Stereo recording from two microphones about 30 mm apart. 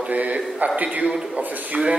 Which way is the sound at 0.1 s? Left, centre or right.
Right.